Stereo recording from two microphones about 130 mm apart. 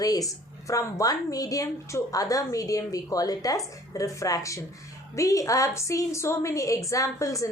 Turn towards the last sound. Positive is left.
turn(degrees=25)  # may be behind; listen again after turning